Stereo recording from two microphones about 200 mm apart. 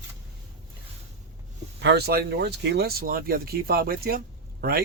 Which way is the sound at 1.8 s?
55° right (ahead or behind).